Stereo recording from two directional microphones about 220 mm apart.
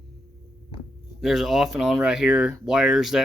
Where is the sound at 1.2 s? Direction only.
Centre (ahead or behind).